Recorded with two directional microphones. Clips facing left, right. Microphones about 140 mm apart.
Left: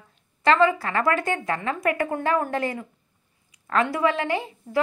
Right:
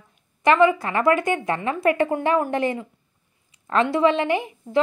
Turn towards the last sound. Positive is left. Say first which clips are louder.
# right 3 dB
turn(degrees=-20)  # may be behind; listen again after turning